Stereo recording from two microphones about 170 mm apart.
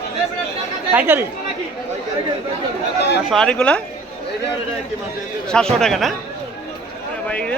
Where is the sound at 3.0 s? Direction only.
80° left.